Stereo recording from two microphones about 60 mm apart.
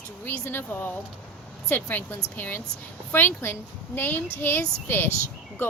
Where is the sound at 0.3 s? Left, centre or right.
Left.